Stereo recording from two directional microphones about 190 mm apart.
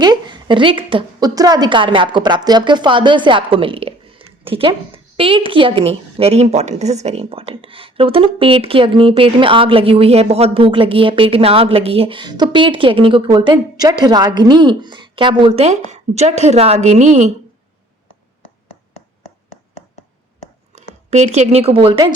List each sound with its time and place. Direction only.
0.0 s a woman's voice: 20° right (ahead or behind); by 17.3 s 40° right (ahead or behind)
21.1 s a woman's voice: 35° right (ahead or behind)